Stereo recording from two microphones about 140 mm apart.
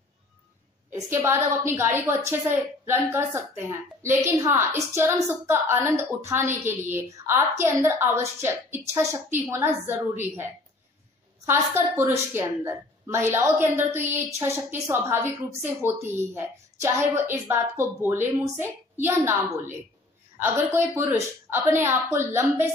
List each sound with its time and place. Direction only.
0.9 s a woman's voice: 20° right (ahead or behind)
11.4 s a woman's voice: 15° right (ahead or behind)
20.3 s a woman's voice: 15° right (ahead or behind)